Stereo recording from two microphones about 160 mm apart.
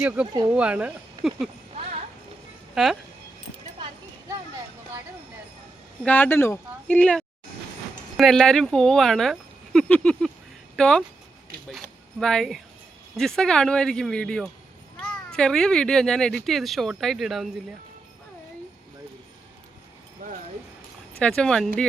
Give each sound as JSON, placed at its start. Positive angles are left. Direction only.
{"t": 0.4, "sound": "speech", "side_deg": -5}
{"t": 2.7, "sound": "speech", "side_deg": 0}
{"t": 6.0, "sound": "speech", "side_deg": 10}
{"t": 12.2, "sound": "speech", "side_deg": 5}
{"t": 20.2, "sound": "jingle bell", "side_deg": -55}
{"t": 21.2, "sound": "speech", "side_deg": 5}